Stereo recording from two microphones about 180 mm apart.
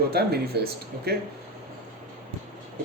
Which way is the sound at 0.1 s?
60° right (ahead or behind).